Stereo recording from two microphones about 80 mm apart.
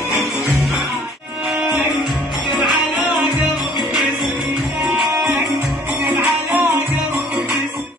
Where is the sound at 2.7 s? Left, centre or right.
Centre.